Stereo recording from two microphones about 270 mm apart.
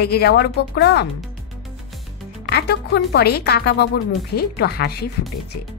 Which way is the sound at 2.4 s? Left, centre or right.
Left.